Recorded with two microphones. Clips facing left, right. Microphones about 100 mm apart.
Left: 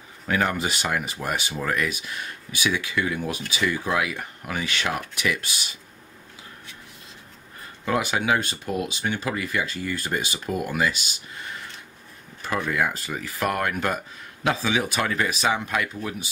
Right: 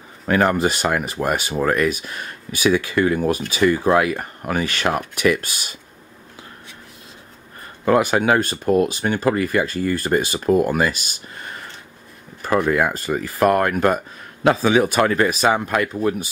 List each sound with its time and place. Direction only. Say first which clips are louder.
0.3 s speech: right 7 dB; 45° right (ahead or behind)
7.8 s speech: right 8 dB; 45° right (ahead or behind)